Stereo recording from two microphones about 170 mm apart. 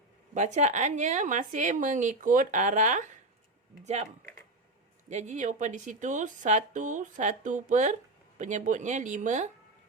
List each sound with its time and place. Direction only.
0.3 s speech: 45° right (ahead or behind)
5.0 s speech: 45° right (ahead or behind)